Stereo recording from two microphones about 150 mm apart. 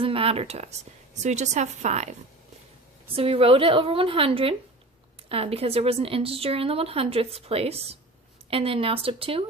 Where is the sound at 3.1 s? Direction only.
40° right (ahead or behind).